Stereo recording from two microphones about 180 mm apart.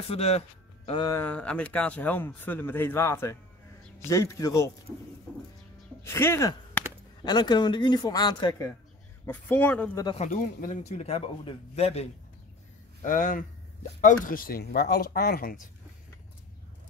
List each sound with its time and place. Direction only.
0.1 s speech: 35° left (ahead or behind)
1.0 s speech: 10° left (ahead or behind)
6.0 s a man's voice: 15° left (ahead or behind)
9.2 s speech: 10° left (ahead or behind)
10.1 s a man's voice: 45° left (ahead or behind)
13.0 s speech: 45° left (ahead or behind)